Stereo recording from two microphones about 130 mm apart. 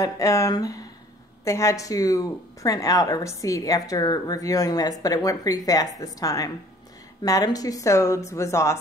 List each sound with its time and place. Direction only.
0.0 s speech: 25° left (ahead or behind)